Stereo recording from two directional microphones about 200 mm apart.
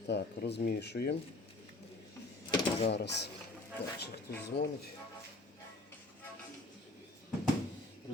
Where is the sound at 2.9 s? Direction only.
55° left (ahead or behind).